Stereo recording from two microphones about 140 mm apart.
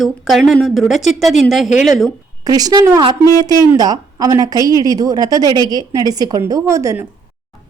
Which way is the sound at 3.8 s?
30° right (ahead or behind).